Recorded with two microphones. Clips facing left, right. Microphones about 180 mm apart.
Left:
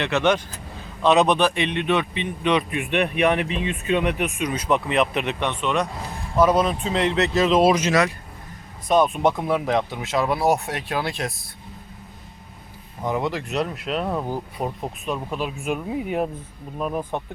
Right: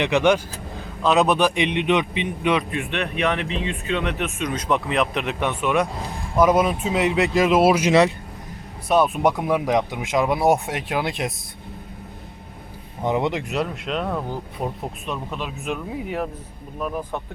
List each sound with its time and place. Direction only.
0.0 s speech: 15° right (ahead or behind)
1.4 s speech: 15° right (ahead or behind)
2.7 s speech: 15° left (ahead or behind); by 11.3 s 20° right (ahead or behind)
13.0 s speech: 20° right (ahead or behind)
13.5 s speech: centre (ahead or behind)
16.8 s speech: 20° left (ahead or behind)